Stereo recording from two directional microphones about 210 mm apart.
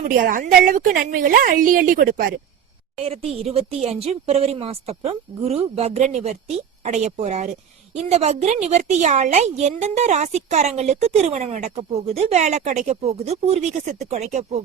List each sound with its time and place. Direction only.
0.1 s a woman's voice: 40° right (ahead or behind)
3.0 s a woman's voice: 30° right (ahead or behind)